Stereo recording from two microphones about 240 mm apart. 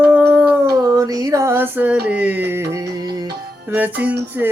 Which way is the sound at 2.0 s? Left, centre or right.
Centre.